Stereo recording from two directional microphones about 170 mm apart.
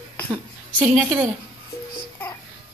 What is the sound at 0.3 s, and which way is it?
A woman's voice, 10° right (ahead or behind).